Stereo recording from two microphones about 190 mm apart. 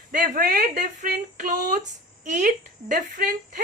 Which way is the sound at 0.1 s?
45° right (ahead or behind).